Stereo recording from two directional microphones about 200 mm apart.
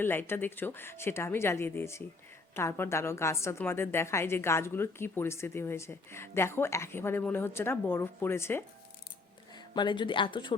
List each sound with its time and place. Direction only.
0.0 s a woman's voice: 10° left (ahead or behind)
9.7 s speech: 25° left (ahead or behind)